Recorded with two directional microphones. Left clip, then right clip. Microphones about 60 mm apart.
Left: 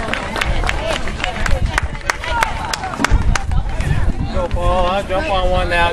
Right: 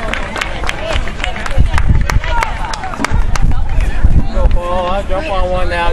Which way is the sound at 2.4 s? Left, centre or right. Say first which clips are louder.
Right 1 dB; right.